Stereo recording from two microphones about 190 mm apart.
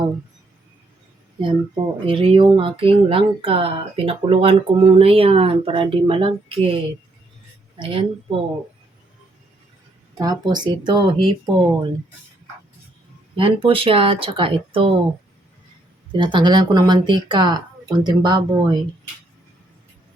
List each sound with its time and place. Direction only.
1.4 s speech: 25° right (ahead or behind)
7.8 s speech: 25° right (ahead or behind)
10.2 s speech: 20° right (ahead or behind)
13.3 s speech: 30° right (ahead or behind)
16.1 s speech: 25° right (ahead or behind)